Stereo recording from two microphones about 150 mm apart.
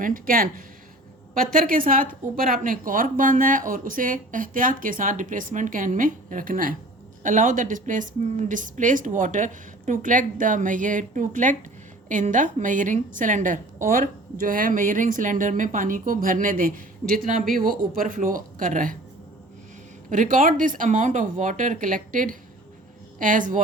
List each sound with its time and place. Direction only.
0.0 s a woman's voice: 70° right (ahead or behind)
20.1 s a woman's voice: 60° right (ahead or behind)